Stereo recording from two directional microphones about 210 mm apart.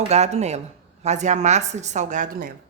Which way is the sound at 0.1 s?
30° right (ahead or behind).